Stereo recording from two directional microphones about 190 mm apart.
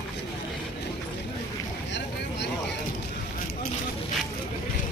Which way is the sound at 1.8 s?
65° left (ahead or behind).